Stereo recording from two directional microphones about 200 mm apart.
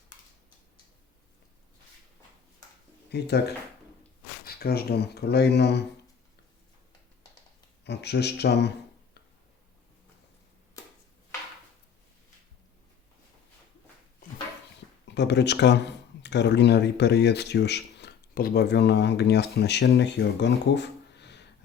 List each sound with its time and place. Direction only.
3.1 s speech: 55° left (ahead or behind)
7.9 s speech: 55° left (ahead or behind)
15.0 s speech: 60° left (ahead or behind)